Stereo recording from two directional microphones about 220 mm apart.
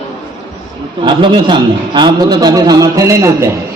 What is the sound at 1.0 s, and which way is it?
A man's voice, 20° right (ahead or behind).